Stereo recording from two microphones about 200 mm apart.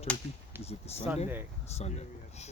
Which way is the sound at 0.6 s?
30° left (ahead or behind).